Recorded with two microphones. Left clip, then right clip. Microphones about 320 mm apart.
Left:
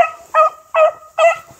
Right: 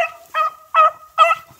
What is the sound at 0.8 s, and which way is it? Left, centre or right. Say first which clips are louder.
Fowl: left 3 dB; centre.